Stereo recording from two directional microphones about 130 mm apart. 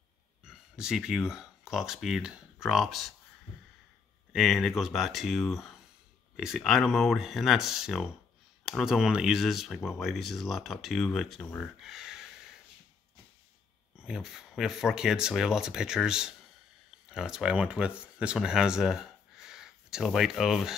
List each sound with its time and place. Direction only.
0.5 s speech: 5° right (ahead or behind)
4.3 s speech: 5° right (ahead or behind)
13.9 s speech: 5° right (ahead or behind)